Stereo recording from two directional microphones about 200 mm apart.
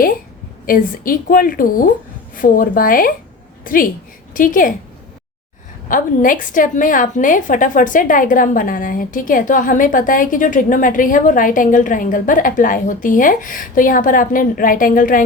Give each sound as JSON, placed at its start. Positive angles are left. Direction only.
{"t": 0.6, "sound": "a woman's voice", "side_deg": 45}
{"t": 5.9, "sound": "a woman's voice", "side_deg": 40}